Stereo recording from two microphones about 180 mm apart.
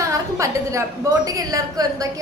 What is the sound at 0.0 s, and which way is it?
A woman's voice, 15° right (ahead or behind).